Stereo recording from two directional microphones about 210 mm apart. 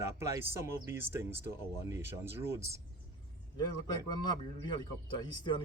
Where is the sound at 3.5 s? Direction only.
20° left (ahead or behind).